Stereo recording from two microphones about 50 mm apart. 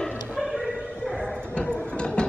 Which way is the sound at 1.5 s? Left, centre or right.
Left.